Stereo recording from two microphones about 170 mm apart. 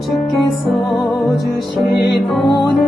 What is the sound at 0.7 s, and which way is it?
Music, centre (ahead or behind).